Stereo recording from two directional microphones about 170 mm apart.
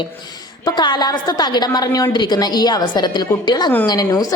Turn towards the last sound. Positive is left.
turn(degrees=20)  # may be behind; listen again after turning